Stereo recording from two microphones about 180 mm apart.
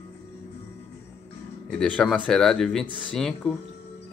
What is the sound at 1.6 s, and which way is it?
Speech, 5° left (ahead or behind).